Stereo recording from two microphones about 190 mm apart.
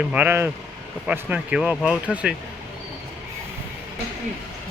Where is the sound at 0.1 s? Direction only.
10° right (ahead or behind).